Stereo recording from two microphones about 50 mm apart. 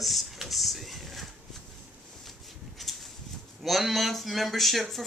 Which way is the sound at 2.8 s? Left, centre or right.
Centre.